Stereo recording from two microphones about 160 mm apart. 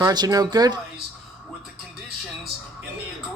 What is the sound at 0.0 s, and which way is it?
Speech, 25° right (ahead or behind).